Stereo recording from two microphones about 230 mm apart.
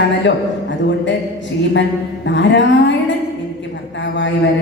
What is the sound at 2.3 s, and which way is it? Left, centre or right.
Speech, left.